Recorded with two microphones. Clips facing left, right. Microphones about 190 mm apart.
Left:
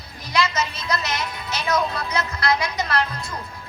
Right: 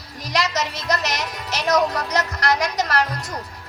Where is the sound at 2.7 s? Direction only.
40° right (ahead or behind).